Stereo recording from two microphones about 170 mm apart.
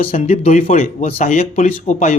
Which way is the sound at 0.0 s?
40° left (ahead or behind).